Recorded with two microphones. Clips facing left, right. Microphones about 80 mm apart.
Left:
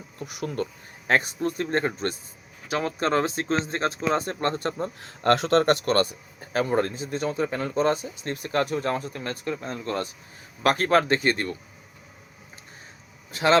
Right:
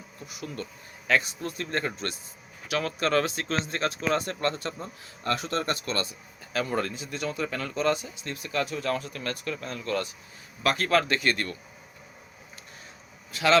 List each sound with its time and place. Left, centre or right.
0.4 s speech: left
4.9 s speech: left
6.4 s speech: left
10.6 s speech: left
13.3 s speech: left